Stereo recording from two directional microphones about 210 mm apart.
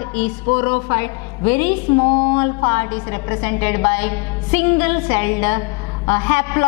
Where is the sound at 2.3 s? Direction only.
15° left (ahead or behind).